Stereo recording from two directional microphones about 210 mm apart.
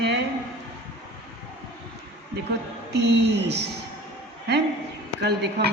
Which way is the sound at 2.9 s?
55° right (ahead or behind).